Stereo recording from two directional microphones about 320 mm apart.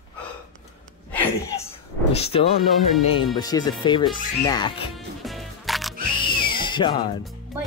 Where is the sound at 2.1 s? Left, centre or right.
Centre.